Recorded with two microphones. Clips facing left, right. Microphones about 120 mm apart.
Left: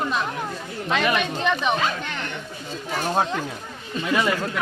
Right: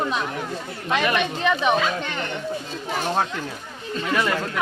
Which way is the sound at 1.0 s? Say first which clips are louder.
Right 1 dB; 10° left (ahead or behind).